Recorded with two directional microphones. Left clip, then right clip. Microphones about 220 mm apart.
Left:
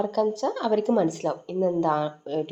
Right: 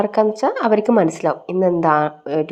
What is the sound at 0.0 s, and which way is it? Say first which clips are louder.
A woman's voice: right 8 dB; 30° right (ahead or behind).